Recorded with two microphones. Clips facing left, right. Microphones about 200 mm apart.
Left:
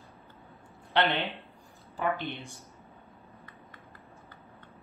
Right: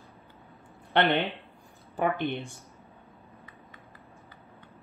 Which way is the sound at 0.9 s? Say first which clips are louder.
Right 2 dB; 55° right (ahead or behind).